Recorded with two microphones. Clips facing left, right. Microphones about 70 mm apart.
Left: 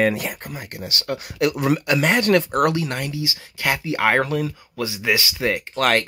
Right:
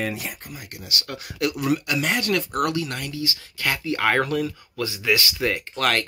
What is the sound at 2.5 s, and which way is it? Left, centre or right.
Speech, left.